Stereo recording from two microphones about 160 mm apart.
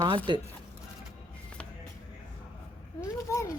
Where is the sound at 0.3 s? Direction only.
25° right (ahead or behind).